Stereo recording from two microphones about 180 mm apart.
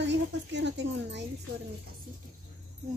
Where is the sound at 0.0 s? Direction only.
75° right (ahead or behind).